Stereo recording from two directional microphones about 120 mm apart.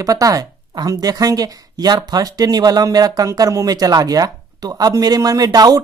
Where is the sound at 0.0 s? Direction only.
30° right (ahead or behind).